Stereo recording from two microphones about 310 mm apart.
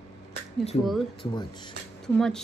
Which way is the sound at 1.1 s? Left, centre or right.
Centre.